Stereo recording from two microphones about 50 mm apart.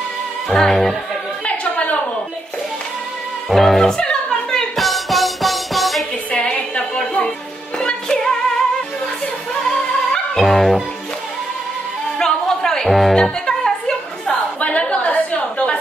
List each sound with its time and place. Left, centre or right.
0.5 s music: centre
1.4 s a sound: left
3.4 s speech: centre
4.0 s music: centre
4.7 s music: centre
6.3 s a sound: left
7.8 s music: centre
10.4 s music: centre
12.2 s music: centre
13.1 s music: centre
14.6 s a sound: left